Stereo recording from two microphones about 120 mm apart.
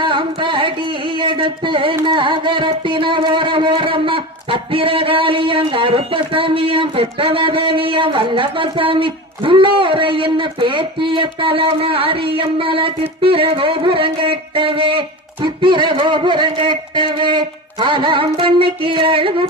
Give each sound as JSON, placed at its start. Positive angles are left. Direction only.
{"t": 0.0, "sound": "carnatic music", "side_deg": -45}